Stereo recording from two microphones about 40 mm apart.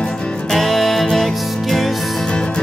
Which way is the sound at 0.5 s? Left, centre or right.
Centre.